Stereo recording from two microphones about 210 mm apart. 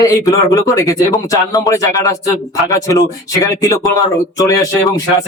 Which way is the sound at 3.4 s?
15° left (ahead or behind).